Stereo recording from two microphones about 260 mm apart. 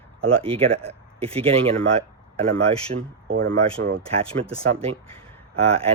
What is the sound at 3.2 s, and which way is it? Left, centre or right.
Speech, right.